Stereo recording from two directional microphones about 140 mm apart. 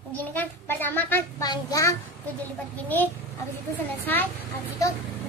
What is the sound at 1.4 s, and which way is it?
Speech, 25° left (ahead or behind).